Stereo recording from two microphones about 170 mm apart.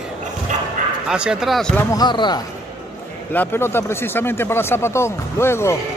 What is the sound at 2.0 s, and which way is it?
Speech, 25° left (ahead or behind).